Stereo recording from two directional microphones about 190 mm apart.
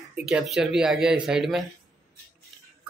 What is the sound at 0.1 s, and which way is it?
A man's voice, 5° right (ahead or behind).